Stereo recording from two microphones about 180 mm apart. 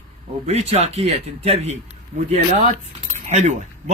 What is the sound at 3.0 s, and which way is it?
Cutlery, 40° right (ahead or behind).